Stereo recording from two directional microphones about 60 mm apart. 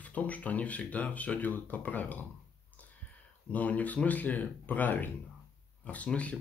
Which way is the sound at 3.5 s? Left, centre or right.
Left.